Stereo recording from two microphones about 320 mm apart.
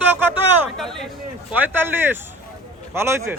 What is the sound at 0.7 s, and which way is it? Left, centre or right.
A man's voice, centre.